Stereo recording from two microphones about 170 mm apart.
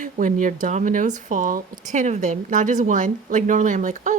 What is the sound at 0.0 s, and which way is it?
Speech, 50° right (ahead or behind).